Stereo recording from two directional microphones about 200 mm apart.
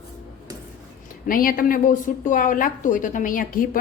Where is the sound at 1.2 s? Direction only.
45° left (ahead or behind).